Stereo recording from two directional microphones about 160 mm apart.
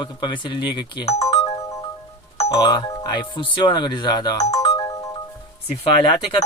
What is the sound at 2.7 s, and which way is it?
Speech, 25° left (ahead or behind).